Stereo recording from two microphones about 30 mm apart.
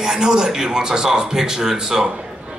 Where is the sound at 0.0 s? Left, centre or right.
Right.